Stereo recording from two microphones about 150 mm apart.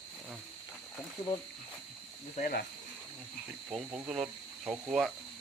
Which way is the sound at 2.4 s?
90° left.